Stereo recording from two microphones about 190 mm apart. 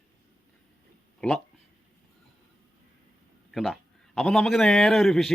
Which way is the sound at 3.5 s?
Centre (ahead or behind).